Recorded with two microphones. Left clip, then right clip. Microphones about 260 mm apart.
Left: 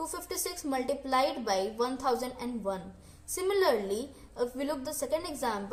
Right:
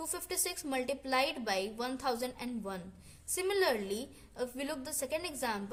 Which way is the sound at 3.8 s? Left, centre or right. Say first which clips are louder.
Left 5 dB; right.